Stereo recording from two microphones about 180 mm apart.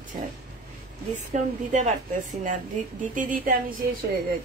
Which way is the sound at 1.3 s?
40° right (ahead or behind).